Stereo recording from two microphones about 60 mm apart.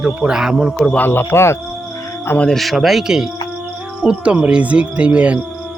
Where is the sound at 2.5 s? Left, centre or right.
Centre.